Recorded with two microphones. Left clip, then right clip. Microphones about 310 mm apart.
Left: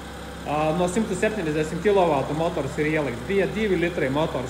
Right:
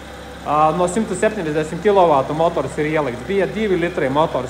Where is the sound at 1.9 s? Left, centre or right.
Right.